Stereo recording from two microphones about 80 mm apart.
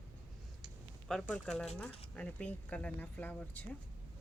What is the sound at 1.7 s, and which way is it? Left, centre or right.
Speech, centre.